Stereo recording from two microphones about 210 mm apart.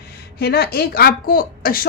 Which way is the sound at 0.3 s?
50° left (ahead or behind).